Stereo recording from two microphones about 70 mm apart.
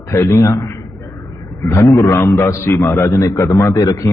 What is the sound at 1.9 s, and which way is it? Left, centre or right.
Speech, left.